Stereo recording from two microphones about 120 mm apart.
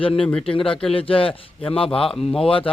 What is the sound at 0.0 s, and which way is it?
A man's voice, 50° left (ahead or behind).